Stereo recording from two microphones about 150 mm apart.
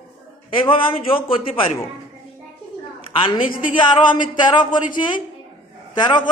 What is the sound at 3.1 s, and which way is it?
A man's voice, 35° left (ahead or behind).